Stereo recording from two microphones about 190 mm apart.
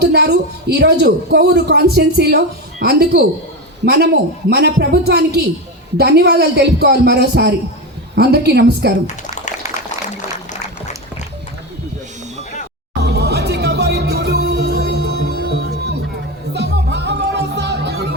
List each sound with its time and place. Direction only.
0.0 s a woman's voice: 60° right (ahead or behind)
13.0 s music: 60° right (ahead or behind)